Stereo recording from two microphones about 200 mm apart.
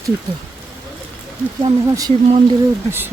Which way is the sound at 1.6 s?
25° right (ahead or behind).